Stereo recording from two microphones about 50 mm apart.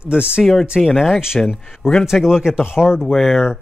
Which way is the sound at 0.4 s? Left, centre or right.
Centre.